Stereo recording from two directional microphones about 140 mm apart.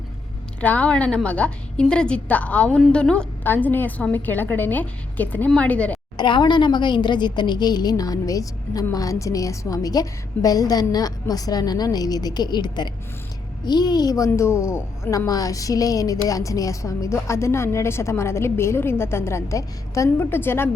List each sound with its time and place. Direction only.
0.6 s a woman's voice: 10° left (ahead or behind)
6.1 s a woman's voice: 35° left (ahead or behind); by 20.7 s 15° left (ahead or behind)